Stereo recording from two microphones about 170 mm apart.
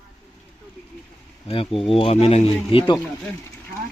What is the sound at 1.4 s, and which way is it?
Speech, 35° left (ahead or behind).